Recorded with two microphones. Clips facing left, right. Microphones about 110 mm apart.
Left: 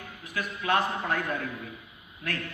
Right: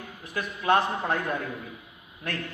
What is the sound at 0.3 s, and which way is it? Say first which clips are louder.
Speech: right 3 dB; 30° right (ahead or behind).